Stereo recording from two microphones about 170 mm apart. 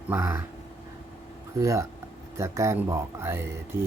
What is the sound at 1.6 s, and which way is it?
Speech, 15° right (ahead or behind).